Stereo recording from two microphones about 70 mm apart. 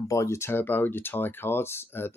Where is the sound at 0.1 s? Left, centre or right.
Left.